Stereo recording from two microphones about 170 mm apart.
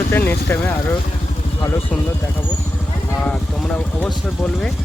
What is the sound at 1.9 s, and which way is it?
Speech, 10° left (ahead or behind).